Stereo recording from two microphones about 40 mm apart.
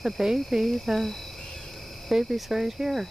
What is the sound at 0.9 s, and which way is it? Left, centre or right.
Speech, centre.